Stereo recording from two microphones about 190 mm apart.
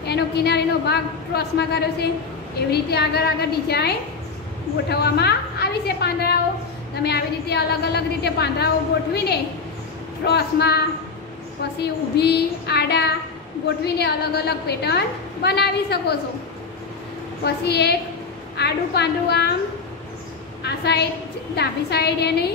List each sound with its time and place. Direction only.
0.0 s a woman's voice: 60° left (ahead or behind)
11.8 s a woman's voice: 60° left (ahead or behind)
17.6 s a woman's voice: 60° left (ahead or behind)
20.6 s a woman's voice: 60° left (ahead or behind)